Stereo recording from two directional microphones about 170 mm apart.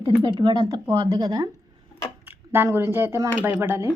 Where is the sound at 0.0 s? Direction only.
30° right (ahead or behind).